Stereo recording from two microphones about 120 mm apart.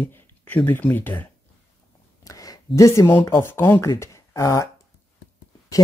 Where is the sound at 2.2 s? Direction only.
30° left (ahead or behind).